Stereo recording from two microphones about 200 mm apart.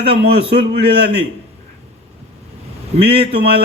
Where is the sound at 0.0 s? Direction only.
55° right (ahead or behind).